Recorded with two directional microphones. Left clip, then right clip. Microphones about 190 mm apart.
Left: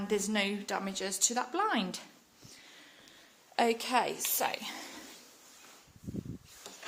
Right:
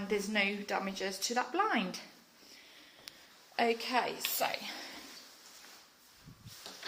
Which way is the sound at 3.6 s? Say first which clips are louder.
Left 2 dB; 35° left (ahead or behind).